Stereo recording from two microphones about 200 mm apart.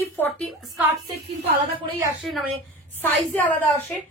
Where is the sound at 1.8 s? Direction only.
15° right (ahead or behind).